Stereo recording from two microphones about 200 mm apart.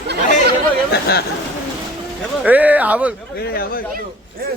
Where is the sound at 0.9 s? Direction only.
50° left (ahead or behind).